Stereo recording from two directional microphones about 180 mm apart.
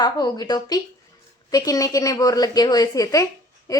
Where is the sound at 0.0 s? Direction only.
20° left (ahead or behind).